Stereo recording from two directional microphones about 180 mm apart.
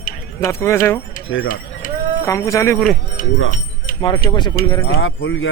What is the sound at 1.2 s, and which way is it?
Speech, 90° left.